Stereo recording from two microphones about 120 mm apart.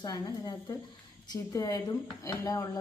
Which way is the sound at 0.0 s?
35° left (ahead or behind).